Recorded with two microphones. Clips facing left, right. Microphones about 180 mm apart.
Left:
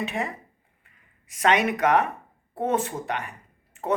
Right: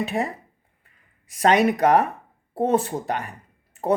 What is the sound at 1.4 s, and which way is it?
Speech, 35° right (ahead or behind).